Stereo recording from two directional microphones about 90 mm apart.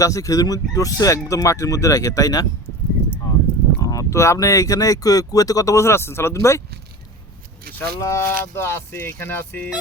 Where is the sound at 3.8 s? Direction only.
40° left (ahead or behind).